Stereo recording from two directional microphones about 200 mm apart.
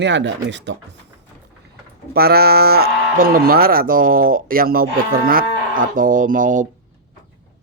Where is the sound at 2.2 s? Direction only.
50° right (ahead or behind).